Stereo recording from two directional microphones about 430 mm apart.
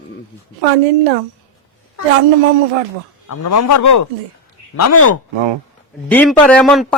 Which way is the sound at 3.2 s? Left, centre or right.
Left.